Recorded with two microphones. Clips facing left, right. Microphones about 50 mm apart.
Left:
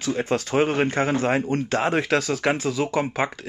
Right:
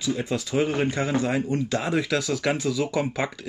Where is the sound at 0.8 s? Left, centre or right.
Left.